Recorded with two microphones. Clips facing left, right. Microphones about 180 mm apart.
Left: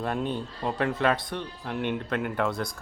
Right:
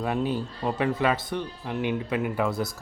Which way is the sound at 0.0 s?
5° right (ahead or behind).